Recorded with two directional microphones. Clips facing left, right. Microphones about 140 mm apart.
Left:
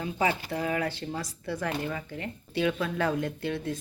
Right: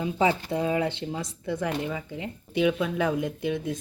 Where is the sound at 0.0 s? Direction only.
20° right (ahead or behind).